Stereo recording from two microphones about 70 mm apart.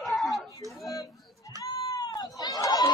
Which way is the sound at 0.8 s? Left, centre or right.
Left.